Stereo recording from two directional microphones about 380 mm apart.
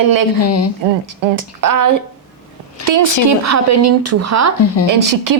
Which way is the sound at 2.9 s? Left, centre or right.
Right.